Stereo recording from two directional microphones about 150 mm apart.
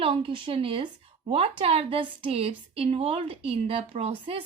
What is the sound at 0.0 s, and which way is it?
A woman's voice, 35° right (ahead or behind).